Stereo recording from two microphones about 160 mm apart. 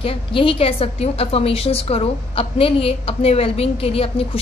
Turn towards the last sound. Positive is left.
turn(degrees=35)  # may be behind; listen again after turning